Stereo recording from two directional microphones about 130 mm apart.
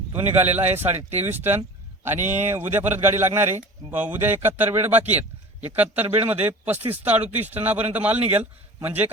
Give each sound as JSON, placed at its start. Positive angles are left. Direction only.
{"t": 0.3, "sound": "a man's voice", "side_deg": -15}